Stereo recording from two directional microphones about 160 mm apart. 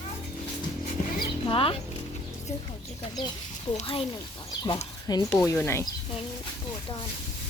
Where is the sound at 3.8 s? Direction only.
35° left (ahead or behind).